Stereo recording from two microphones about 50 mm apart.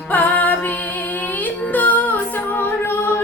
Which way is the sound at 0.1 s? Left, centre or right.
Left.